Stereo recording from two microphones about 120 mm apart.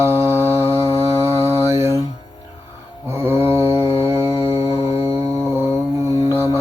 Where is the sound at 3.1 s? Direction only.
20° right (ahead or behind).